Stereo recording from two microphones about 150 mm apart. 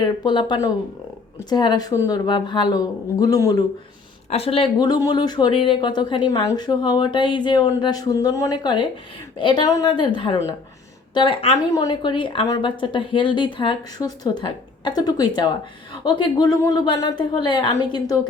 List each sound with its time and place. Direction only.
0.0 s speech: 30° left (ahead or behind)
4.3 s a woman's voice: 40° left (ahead or behind)